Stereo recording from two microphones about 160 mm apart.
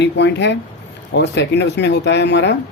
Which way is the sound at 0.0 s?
90° left.